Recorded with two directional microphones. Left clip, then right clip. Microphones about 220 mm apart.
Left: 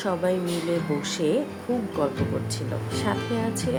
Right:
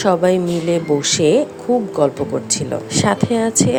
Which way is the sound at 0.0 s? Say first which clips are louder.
Right 11 dB; 40° right (ahead or behind).